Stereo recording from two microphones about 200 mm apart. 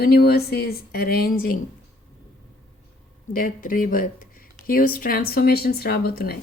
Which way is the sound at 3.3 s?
45° left (ahead or behind).